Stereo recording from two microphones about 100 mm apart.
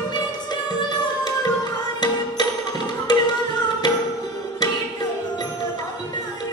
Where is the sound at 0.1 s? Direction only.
45° left (ahead or behind).